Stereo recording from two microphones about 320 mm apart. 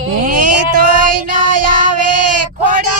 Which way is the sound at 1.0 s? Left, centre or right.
Right.